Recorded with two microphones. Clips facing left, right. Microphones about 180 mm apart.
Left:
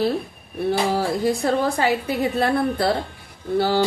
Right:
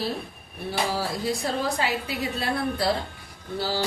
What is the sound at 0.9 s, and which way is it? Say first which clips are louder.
Speech: left 7 dB; 50° left (ahead or behind).